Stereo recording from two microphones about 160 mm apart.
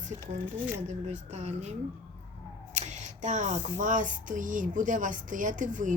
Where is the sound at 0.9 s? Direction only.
45° right (ahead or behind).